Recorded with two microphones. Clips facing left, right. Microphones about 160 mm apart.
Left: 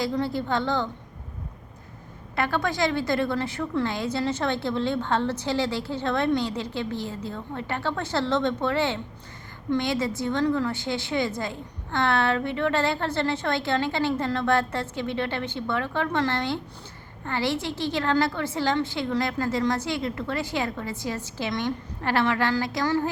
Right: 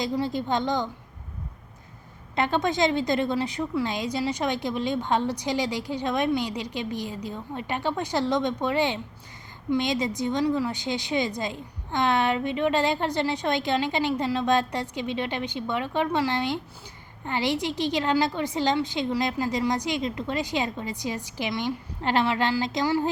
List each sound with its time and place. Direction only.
0.0 s a woman's voice: 15° right (ahead or behind)
2.3 s a woman's voice: 20° right (ahead or behind)